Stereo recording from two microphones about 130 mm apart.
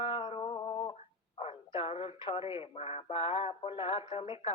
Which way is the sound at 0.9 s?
50° left (ahead or behind).